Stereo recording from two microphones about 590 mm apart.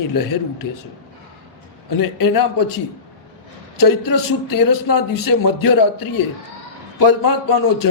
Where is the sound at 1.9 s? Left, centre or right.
Left.